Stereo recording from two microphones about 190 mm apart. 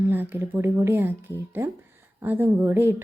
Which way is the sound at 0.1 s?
10° right (ahead or behind).